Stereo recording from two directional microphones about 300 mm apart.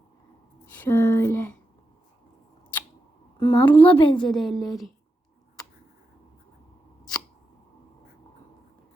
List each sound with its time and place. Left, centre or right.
0.6 s a sound: centre
3.4 s a woman's voice: centre
4.2 s a woman's voice: centre